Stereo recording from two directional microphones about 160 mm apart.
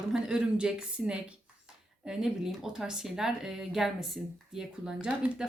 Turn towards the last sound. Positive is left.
turn(degrees=-5)  # may be behind; listen again after turning